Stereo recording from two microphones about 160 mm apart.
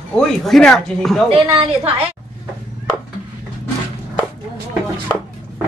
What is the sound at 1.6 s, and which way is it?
Speech, 35° right (ahead or behind).